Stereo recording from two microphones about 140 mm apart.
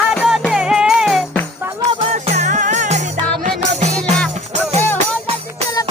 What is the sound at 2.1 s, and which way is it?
Music, 55° right (ahead or behind).